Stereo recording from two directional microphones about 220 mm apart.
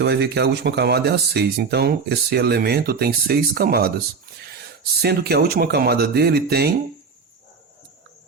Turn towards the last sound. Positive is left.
turn(degrees=-45)  # may be behind; listen again after turning